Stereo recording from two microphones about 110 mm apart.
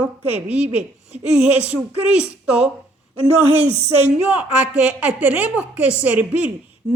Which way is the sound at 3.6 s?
85° right.